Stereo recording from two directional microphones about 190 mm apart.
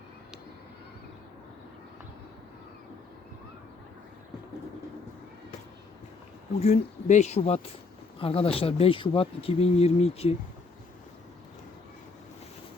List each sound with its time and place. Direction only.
6.6 s speech: 35° left (ahead or behind)